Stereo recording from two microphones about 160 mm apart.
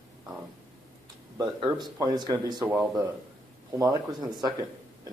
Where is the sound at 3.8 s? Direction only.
25° right (ahead or behind).